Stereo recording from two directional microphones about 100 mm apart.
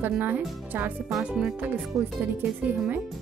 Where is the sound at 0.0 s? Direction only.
20° right (ahead or behind).